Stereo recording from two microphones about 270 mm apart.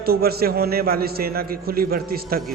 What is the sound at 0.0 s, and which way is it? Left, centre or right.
A man's voice, right.